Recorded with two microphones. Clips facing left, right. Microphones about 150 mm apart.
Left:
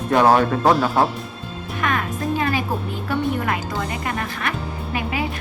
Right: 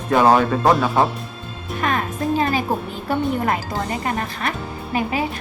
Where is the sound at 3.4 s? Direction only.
35° right (ahead or behind).